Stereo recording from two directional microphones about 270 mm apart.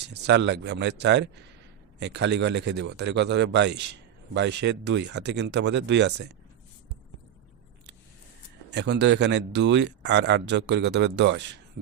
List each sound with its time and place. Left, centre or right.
0.1 s speech: right
8.7 s speech: right